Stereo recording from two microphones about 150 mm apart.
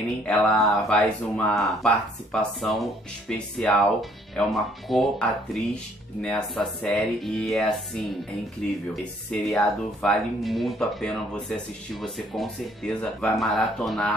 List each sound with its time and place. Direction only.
0.2 s speech: 5° left (ahead or behind)